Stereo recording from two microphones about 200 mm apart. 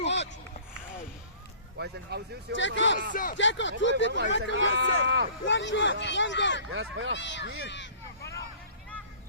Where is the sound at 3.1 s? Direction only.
45° left (ahead or behind).